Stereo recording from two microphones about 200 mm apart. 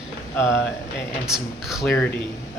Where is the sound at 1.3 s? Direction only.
Centre (ahead or behind).